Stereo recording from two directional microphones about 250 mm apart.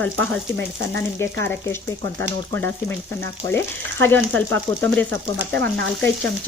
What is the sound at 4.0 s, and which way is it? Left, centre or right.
Speech, centre.